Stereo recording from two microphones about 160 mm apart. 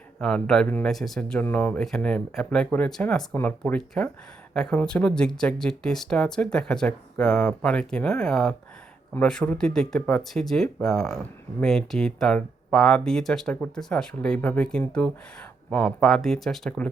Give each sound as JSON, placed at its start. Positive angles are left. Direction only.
{"t": 0.2, "sound": "speech", "side_deg": 5}